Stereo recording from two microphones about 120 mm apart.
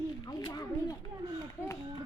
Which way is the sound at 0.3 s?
35° left (ahead or behind).